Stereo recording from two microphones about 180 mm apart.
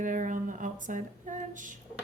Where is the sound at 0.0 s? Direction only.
45° right (ahead or behind).